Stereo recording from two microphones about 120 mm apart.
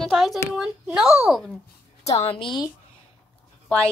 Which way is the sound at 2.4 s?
40° left (ahead or behind).